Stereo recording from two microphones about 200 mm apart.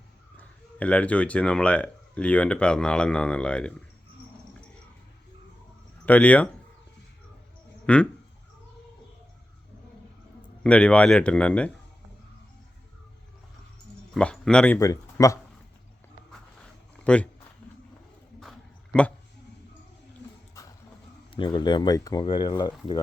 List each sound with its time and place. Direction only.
0.3 s speech: 5° left (ahead or behind)
6.1 s speech: 5° left (ahead or behind)
7.9 s speech: 5° left (ahead or behind)
10.6 s speech: 5° left (ahead or behind)
14.1 s speech: 5° left (ahead or behind)
14.8 s speech: 15° left (ahead or behind)
16.3 s a sound: 5° left (ahead or behind)
21.3 s speech: 25° left (ahead or behind)